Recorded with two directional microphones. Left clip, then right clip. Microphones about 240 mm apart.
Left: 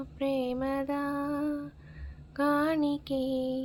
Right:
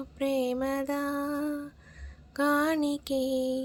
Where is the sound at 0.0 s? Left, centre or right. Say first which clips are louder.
Right 2 dB; right.